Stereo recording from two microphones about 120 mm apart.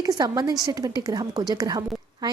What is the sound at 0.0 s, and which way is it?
A woman's voice, 35° right (ahead or behind).